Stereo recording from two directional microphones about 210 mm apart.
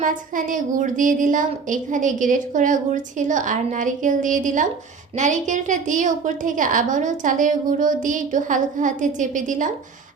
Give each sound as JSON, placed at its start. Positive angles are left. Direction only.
{"t": 0.0, "sound": "a woman's voice", "side_deg": -40}